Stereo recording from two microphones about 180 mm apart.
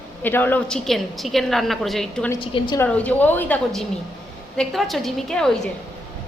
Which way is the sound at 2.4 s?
25° left (ahead or behind).